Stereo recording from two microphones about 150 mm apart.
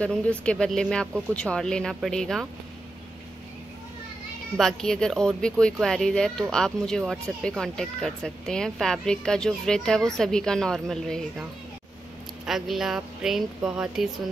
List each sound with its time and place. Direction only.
0.0 s speech: 10° left (ahead or behind)
4.6 s speech: 5° left (ahead or behind)
12.4 s speech: centre (ahead or behind)